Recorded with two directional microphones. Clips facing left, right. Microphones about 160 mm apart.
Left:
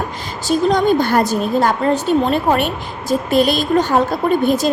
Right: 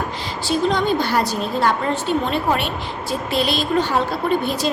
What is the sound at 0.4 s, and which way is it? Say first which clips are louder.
A woman's voice: left 5 dB; 45° left (ahead or behind).